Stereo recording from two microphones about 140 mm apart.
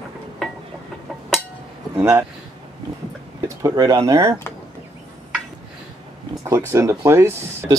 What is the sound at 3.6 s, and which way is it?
Speech, 25° right (ahead or behind).